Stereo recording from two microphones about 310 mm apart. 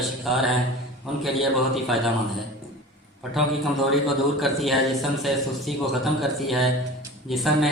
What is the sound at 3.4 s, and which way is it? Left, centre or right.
A man's voice, centre.